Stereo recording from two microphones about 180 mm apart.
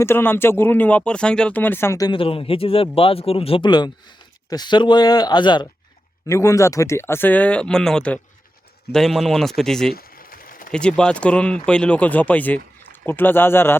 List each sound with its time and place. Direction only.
0.0 s speech: 15° left (ahead or behind)
9.9 s a sound: 55° left (ahead or behind)
10.7 s speech: 5° left (ahead or behind)